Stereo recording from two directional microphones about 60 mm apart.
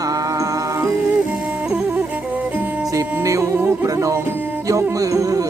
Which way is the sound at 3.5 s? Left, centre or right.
Right.